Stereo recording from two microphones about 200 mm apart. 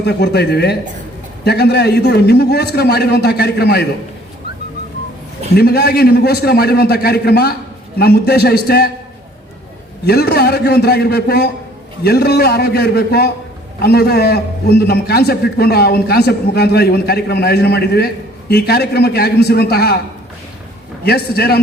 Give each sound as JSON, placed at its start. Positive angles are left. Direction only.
{"t": 0.0, "sound": "a man's voice", "side_deg": 55}
{"t": 5.5, "sound": "a man's voice", "side_deg": 50}
{"t": 10.1, "sound": "a man's voice", "side_deg": 50}
{"t": 21.0, "sound": "a man's voice", "side_deg": 50}